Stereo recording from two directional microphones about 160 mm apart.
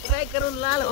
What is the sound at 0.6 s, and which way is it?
Speech, 30° left (ahead or behind).